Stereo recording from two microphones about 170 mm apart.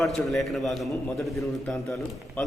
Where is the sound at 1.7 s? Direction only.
15° left (ahead or behind).